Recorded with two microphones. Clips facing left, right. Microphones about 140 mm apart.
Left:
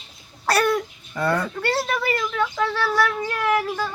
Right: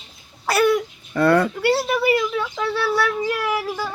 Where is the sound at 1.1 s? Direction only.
75° right (ahead or behind).